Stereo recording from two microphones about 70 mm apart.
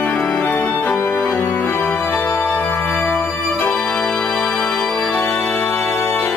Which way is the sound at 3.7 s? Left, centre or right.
Centre.